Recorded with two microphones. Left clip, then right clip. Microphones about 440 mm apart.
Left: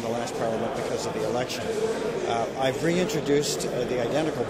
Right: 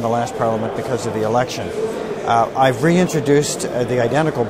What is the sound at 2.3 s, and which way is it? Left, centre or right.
Speech, right.